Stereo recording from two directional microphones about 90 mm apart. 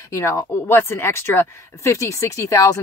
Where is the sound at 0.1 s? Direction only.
35° left (ahead or behind).